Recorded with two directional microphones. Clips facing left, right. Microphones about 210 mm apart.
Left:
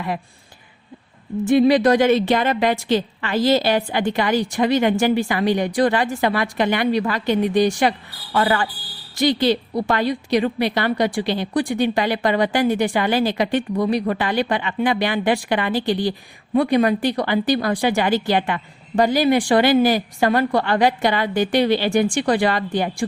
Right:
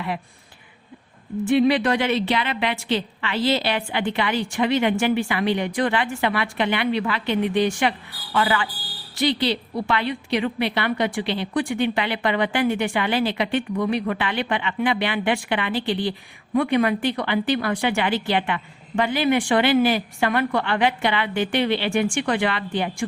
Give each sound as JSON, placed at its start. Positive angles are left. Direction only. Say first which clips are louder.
{"t": 1.5, "sound": "a woman's voice", "louder": "left 4 dB", "side_deg": 40}